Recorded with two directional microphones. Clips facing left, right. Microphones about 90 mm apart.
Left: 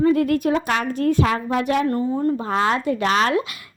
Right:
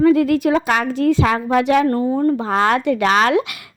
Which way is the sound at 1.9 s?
50° right (ahead or behind).